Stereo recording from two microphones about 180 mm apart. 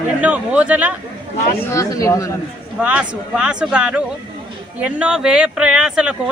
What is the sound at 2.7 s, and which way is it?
A man's voice, 5° right (ahead or behind).